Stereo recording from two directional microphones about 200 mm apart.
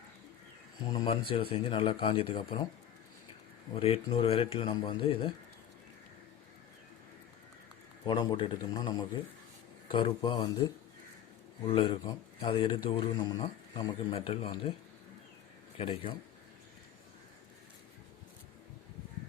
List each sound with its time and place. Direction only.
0.9 s a man's voice: 25° left (ahead or behind)
3.8 s a man's voice: 30° left (ahead or behind)
8.0 s a man's voice: 20° left (ahead or behind)
11.6 s a man's voice: 30° left (ahead or behind)
15.8 s a man's voice: 30° left (ahead or behind)